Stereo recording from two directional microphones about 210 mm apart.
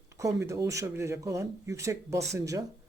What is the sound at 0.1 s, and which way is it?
Speech, 15° right (ahead or behind).